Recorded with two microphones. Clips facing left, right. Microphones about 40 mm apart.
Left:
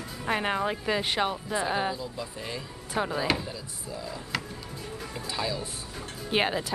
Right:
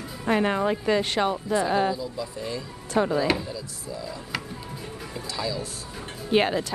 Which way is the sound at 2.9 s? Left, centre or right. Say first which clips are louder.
Right 5 dB; centre.